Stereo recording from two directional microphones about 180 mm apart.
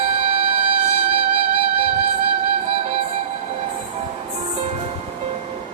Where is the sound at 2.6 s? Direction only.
35° right (ahead or behind).